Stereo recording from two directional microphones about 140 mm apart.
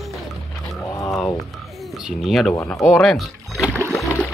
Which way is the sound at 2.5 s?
10° left (ahead or behind).